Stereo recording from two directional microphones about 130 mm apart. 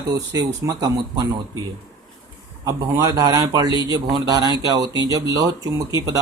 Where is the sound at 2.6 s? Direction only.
25° right (ahead or behind).